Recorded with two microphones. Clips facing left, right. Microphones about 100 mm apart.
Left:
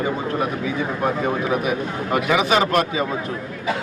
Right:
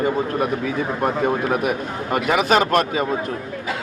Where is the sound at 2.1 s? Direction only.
45° right (ahead or behind).